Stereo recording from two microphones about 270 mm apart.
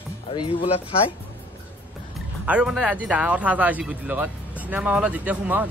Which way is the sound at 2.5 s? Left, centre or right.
Centre.